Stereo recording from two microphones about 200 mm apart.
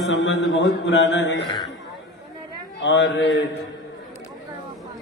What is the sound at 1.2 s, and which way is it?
Speech, 60° left (ahead or behind).